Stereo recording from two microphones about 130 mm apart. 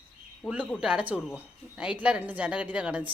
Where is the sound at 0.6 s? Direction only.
5° left (ahead or behind).